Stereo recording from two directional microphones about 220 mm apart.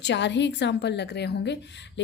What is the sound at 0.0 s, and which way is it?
A woman's voice, 55° left (ahead or behind).